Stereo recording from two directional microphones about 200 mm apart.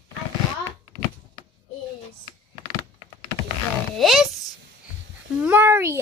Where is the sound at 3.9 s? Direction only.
Centre (ahead or behind).